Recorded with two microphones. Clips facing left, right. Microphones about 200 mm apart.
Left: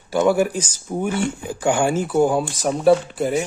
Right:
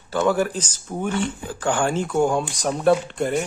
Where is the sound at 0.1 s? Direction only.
10° left (ahead or behind).